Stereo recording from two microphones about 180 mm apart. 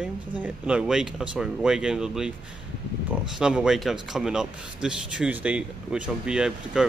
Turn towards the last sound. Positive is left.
turn(degrees=-5)  # may be behind; listen again after turning